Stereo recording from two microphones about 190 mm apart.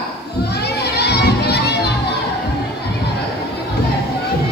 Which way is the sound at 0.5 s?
60° left (ahead or behind).